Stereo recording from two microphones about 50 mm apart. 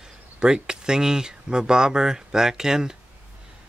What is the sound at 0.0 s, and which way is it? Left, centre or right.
Speech, centre.